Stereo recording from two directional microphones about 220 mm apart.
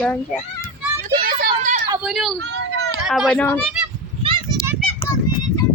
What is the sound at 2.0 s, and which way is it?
A child's voice, centre (ahead or behind).